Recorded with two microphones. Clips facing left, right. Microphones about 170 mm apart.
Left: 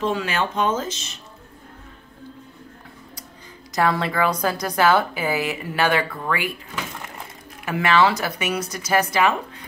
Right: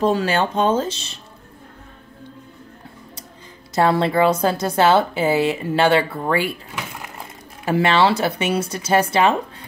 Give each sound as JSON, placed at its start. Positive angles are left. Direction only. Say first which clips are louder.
{"t": 0.0, "sound": "speech", "louder": "right 5 dB", "side_deg": -35}
{"t": 3.7, "sound": "a woman's voice", "louder": "right 4 dB", "side_deg": -30}
{"t": 7.6, "sound": "a woman's voice", "louder": "right 2 dB", "side_deg": -30}